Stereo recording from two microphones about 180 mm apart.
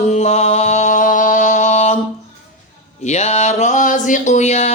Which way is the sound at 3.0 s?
40° left (ahead or behind).